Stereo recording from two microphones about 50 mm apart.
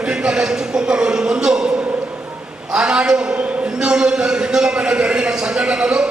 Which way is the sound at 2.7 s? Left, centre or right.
Centre.